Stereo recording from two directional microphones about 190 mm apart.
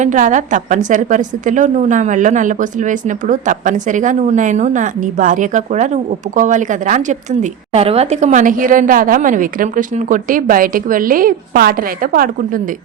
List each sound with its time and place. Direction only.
0.0 s a woman's voice: 40° right (ahead or behind)
7.7 s a woman's voice: 30° right (ahead or behind); by 12.3 s 50° right (ahead or behind)